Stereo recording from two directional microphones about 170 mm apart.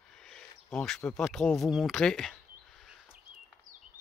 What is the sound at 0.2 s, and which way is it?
Speech, 5° left (ahead or behind).